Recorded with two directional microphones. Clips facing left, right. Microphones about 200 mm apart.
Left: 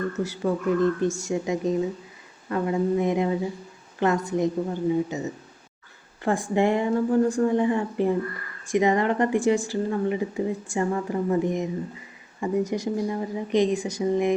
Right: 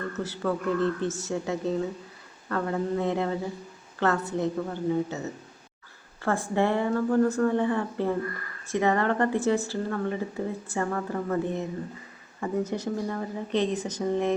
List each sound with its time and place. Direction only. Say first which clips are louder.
0.2 s a woman's voice: even; 10° left (ahead or behind)